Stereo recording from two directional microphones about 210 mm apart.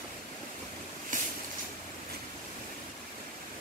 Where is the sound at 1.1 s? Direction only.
35° right (ahead or behind).